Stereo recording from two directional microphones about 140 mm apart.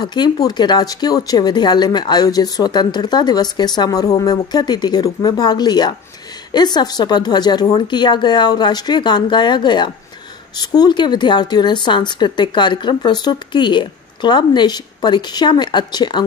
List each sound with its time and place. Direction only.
0.0 s speech: 30° left (ahead or behind)